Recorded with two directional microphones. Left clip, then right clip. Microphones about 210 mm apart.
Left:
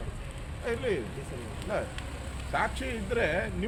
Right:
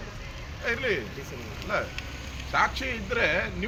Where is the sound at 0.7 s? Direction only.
15° left (ahead or behind).